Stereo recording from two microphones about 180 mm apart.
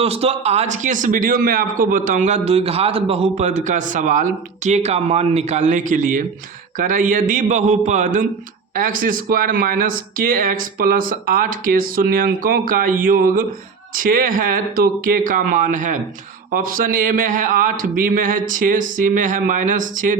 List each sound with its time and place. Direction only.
0.0 s a man's voice: 35° right (ahead or behind)